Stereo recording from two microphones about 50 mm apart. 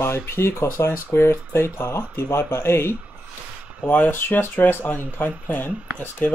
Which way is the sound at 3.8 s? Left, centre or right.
Left.